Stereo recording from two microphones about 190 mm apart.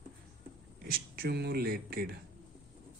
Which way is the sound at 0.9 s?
55° right (ahead or behind).